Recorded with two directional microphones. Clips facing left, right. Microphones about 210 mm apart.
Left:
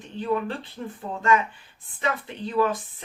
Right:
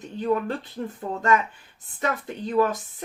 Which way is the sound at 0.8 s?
40° right (ahead or behind).